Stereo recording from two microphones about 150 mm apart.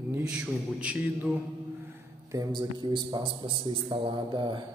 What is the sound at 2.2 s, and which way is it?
A man's voice, 20° right (ahead or behind).